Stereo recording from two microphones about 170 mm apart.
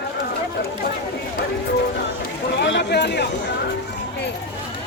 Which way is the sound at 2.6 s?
90° left.